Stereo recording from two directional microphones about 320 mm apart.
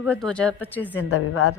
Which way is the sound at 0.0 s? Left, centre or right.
Centre.